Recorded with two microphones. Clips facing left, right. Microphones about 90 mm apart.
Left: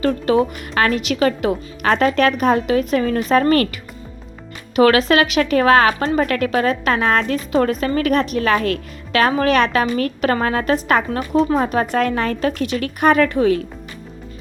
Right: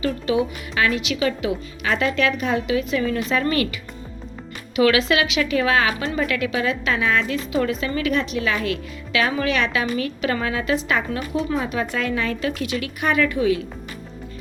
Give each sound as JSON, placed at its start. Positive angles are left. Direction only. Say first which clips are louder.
{"t": 0.0, "sound": "speech", "louder": "left 5 dB", "side_deg": 45}